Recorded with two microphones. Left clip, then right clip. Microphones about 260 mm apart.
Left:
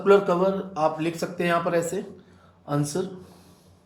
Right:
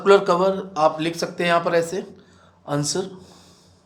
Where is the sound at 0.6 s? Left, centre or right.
Right.